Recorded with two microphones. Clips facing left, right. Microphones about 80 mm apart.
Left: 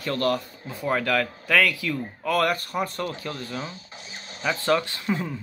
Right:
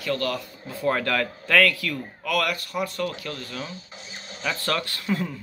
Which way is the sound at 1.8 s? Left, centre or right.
Left.